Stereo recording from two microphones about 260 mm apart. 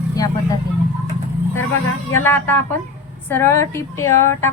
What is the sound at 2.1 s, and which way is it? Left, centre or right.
A woman's voice, centre.